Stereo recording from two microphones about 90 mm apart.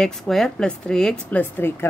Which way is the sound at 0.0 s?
5° left (ahead or behind).